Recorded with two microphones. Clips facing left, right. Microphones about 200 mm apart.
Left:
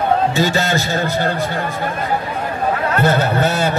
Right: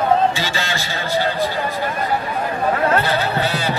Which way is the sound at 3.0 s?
50° left (ahead or behind).